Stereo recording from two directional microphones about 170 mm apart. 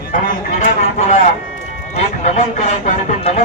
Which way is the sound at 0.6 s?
40° left (ahead or behind).